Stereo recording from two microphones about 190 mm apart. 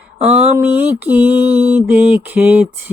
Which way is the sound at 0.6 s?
10° right (ahead or behind).